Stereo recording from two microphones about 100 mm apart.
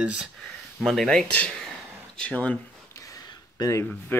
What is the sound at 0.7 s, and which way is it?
Speech, centre (ahead or behind).